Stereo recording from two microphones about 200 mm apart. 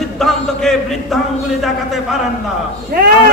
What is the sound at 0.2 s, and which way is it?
Speech, centre (ahead or behind).